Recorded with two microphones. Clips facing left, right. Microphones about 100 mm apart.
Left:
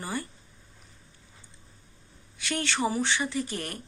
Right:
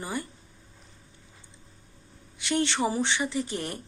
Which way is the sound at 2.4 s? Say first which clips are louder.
Right 3 dB; 20° right (ahead or behind).